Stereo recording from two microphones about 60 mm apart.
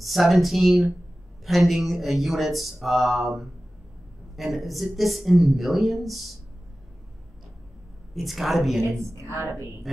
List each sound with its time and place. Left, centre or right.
0.0 s speech: centre
8.1 s speech: centre
8.8 s a woman's voice: right